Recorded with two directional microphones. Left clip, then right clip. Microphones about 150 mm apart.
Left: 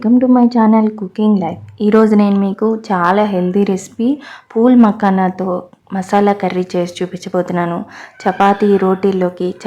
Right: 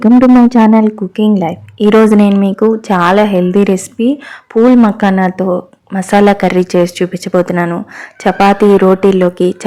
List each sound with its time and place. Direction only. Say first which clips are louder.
0.0 s speech: right 5 dB; 30° right (ahead or behind)
8.2 s speech: right 3 dB; 35° right (ahead or behind)
8.7 s speech: right 6 dB; 20° right (ahead or behind)